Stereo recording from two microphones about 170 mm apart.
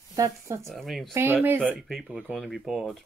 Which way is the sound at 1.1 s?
15° right (ahead or behind).